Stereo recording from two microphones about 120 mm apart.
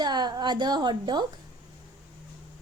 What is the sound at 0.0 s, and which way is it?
A woman's voice, 35° right (ahead or behind).